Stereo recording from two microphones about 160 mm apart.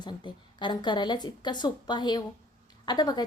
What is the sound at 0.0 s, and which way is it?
A woman's voice, 30° left (ahead or behind).